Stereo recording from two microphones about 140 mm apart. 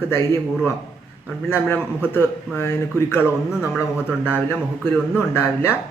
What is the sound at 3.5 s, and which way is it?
Speech, 5° right (ahead or behind).